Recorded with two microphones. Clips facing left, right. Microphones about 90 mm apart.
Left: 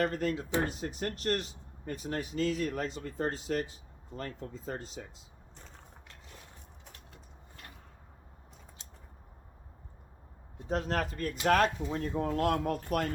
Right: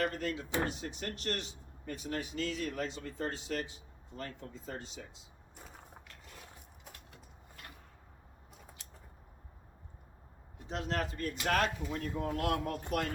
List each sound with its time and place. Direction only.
0.0 s speech: 45° left (ahead or behind)
5.5 s mechanisms: 10° right (ahead or behind)
10.7 s speech: 45° left (ahead or behind)